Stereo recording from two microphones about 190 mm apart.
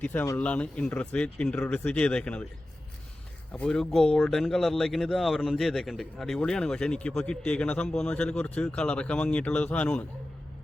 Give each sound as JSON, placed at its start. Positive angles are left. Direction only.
{"t": 0.0, "sound": "speech", "side_deg": 10}
{"t": 3.5, "sound": "speech", "side_deg": 5}